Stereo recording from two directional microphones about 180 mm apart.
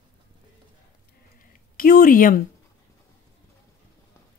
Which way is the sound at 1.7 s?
50° left (ahead or behind).